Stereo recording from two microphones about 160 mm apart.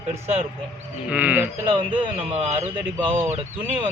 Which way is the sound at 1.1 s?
10° right (ahead or behind).